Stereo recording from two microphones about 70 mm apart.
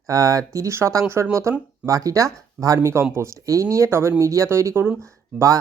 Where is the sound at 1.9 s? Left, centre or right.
Right.